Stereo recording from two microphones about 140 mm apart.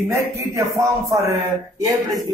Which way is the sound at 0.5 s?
20° right (ahead or behind).